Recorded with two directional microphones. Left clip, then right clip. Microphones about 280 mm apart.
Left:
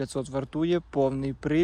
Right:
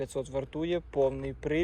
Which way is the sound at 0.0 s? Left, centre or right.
Left.